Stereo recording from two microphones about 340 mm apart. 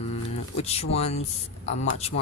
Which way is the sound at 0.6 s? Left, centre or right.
Centre.